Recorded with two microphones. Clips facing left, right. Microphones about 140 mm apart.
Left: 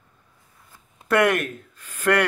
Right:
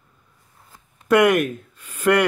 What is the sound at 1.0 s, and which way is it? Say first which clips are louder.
Speech: right 4 dB; 10° right (ahead or behind).